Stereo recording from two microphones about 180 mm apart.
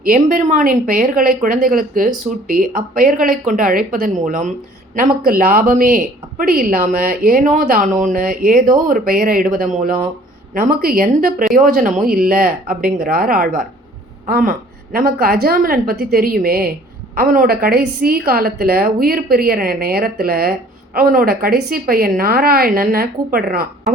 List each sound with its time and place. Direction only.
0.0 s a woman's voice: 50° right (ahead or behind)